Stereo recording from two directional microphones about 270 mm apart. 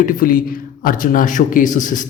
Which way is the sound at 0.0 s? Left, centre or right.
Left.